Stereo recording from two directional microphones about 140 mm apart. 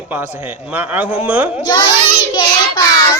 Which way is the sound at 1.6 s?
30° left (ahead or behind).